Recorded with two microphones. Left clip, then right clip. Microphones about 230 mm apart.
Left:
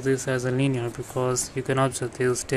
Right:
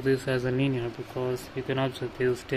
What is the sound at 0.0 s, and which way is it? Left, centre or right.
Speech, centre.